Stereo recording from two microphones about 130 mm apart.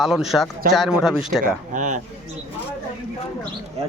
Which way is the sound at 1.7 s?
75° right (ahead or behind).